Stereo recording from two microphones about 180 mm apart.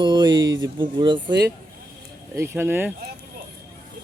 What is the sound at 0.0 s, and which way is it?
Speech, 25° right (ahead or behind).